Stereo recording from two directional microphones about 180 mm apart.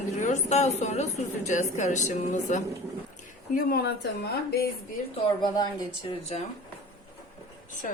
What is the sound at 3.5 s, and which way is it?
Speech, 60° left (ahead or behind).